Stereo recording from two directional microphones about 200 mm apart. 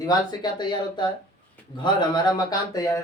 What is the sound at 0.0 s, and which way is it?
Speech, 20° left (ahead or behind).